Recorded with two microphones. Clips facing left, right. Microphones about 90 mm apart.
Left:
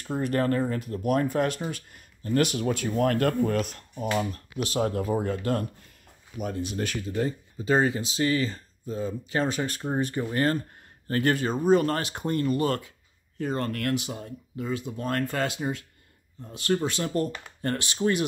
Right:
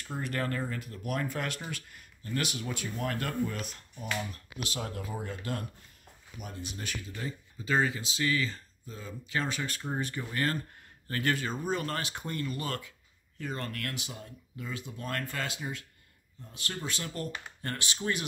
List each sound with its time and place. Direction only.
0.0 s speech: 35° left (ahead or behind)
6.3 s speech: 80° left
7.1 s speech: 45° left (ahead or behind)
9.8 s speech: 25° left (ahead or behind); by 12.3 s 55° left (ahead or behind)
12.3 s speech: 40° left (ahead or behind)
18.0 s speech: 55° left (ahead or behind)